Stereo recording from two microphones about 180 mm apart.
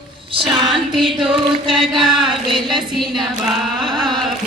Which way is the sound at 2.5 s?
25° right (ahead or behind).